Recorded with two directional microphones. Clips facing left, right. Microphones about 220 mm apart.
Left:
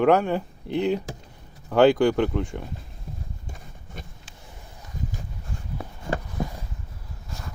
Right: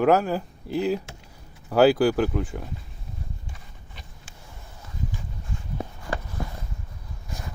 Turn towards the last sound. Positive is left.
turn(degrees=25)  # may be behind; listen again after turning